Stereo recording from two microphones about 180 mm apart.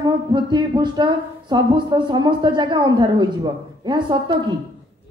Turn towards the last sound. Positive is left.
turn(degrees=-25)  # may be behind; listen again after turning